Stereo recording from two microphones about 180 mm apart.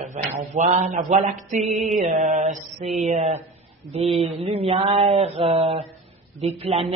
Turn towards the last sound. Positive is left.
turn(degrees=-30)  # may be behind; listen again after turning